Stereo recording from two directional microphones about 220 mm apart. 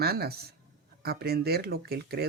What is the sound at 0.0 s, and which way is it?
Speech, 45° right (ahead or behind).